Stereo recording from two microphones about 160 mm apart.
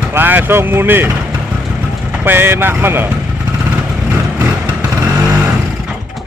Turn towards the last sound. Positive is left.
turn(degrees=-10)  # may be behind; listen again after turning